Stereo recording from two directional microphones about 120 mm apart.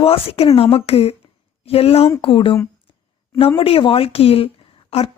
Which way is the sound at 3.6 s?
50° left (ahead or behind).